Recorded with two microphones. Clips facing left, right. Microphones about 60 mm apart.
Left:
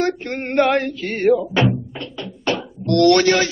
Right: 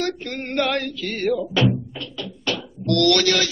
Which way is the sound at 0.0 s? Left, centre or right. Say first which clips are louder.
Left 5 dB; left.